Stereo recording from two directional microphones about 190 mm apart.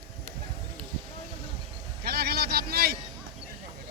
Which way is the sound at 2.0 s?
55° right (ahead or behind).